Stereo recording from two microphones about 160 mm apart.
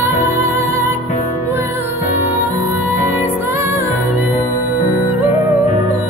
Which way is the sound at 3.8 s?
40° left (ahead or behind).